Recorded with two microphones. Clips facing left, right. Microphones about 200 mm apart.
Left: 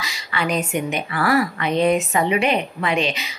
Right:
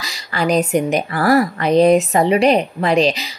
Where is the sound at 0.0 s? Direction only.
40° right (ahead or behind).